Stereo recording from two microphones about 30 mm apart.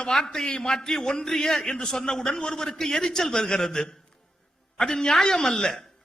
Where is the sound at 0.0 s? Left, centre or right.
Left.